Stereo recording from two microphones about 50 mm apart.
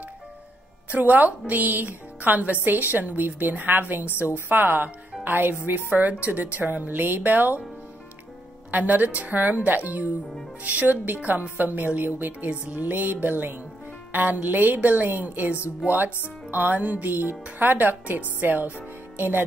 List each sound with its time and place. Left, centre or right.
0.9 s a woman's voice: right
8.7 s a woman's voice: right